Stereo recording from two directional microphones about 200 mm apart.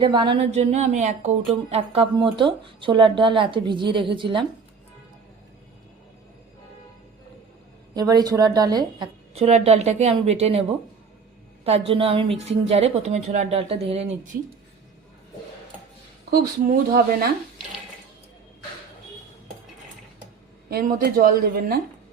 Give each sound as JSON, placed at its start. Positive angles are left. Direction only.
{"t": 0.0, "sound": "a woman's voice", "side_deg": -25}
{"t": 7.9, "sound": "a woman's voice", "side_deg": -20}
{"t": 11.9, "sound": "speech", "side_deg": -30}
{"t": 16.3, "sound": "a woman's voice", "side_deg": -50}
{"t": 20.7, "sound": "a woman's voice", "side_deg": -50}